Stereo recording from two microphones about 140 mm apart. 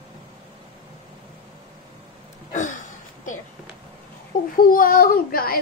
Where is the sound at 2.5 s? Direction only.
65° left (ahead or behind).